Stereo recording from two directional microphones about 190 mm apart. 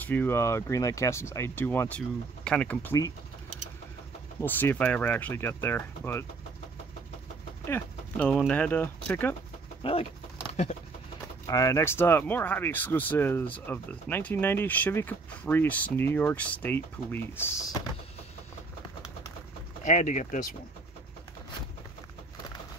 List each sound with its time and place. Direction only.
0.0 s speech: 10° left (ahead or behind)
4.4 s speech: 10° left (ahead or behind)
7.6 s speech: 10° left (ahead or behind)
9.8 s a sound: 25° left (ahead or behind)
10.5 s a sound: 35° left (ahead or behind)
11.4 s speech: 15° left (ahead or behind)
19.8 s speech: 40° left (ahead or behind)